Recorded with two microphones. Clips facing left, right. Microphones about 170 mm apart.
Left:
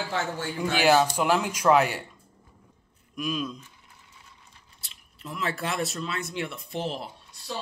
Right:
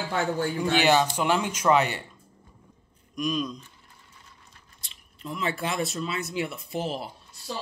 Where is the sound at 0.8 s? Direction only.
5° left (ahead or behind).